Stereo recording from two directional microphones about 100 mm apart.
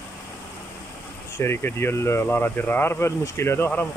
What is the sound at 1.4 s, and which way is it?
Speech, 25° left (ahead or behind).